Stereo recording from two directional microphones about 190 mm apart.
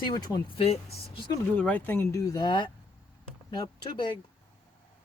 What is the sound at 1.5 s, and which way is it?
Speech, 5° left (ahead or behind).